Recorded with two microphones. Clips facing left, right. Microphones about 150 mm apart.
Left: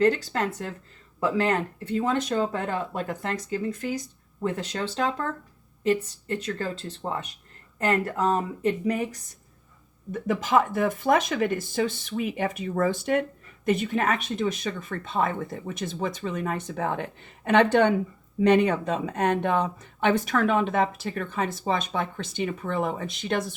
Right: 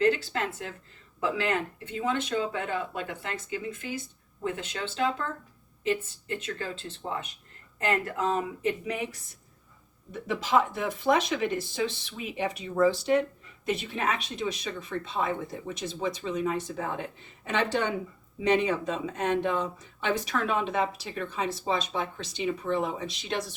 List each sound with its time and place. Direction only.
0.0 s speech: 40° left (ahead or behind)